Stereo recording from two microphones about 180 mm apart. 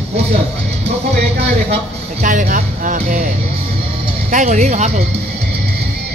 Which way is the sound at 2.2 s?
45° right (ahead or behind).